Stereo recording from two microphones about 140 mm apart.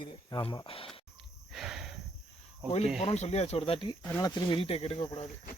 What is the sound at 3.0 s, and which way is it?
Speech, 50° left (ahead or behind).